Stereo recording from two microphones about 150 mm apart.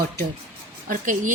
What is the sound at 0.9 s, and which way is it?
Speech, 60° right (ahead or behind).